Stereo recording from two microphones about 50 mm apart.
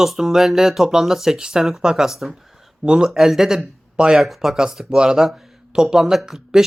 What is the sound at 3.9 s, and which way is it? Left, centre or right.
Speech, centre.